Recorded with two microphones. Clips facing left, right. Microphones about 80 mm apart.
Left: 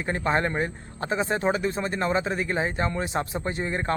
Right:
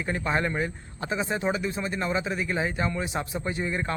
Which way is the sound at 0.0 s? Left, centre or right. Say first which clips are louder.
Left 2 dB; left.